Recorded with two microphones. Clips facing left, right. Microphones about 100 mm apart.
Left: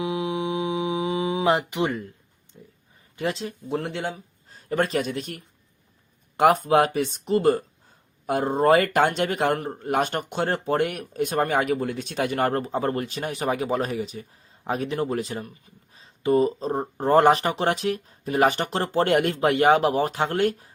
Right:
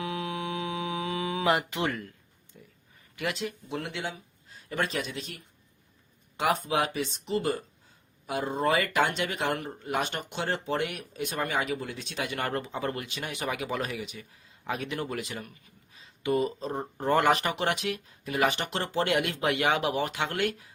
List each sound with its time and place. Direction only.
0.0 s mantra: 20° left (ahead or behind)
3.2 s speech: 30° left (ahead or behind)